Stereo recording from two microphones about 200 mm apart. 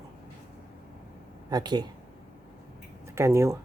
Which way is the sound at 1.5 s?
20° right (ahead or behind).